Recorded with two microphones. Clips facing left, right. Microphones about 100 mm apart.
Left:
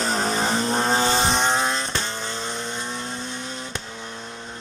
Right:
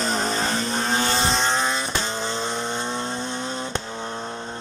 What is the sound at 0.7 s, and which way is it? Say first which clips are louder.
Vehicle: left 3 dB; 40° left (ahead or behind).